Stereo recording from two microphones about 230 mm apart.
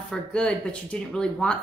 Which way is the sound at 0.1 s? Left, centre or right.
Centre.